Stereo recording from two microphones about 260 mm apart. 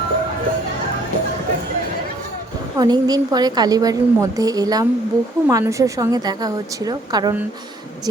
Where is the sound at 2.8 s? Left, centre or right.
Centre.